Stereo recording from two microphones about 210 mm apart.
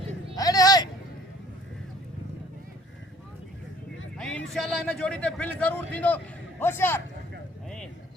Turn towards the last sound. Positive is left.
turn(degrees=10)  # may be behind; listen again after turning